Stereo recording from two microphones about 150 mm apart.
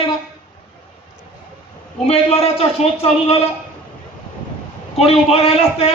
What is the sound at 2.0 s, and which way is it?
A man's voice, 40° left (ahead or behind).